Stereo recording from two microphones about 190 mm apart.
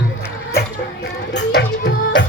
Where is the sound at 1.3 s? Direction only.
65° left (ahead or behind).